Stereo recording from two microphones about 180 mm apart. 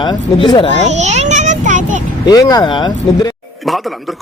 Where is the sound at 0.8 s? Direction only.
40° right (ahead or behind).